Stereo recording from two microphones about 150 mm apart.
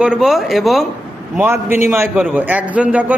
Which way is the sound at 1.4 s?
15° right (ahead or behind).